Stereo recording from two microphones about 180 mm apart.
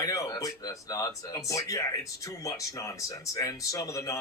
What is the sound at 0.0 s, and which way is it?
Speech, 20° left (ahead or behind).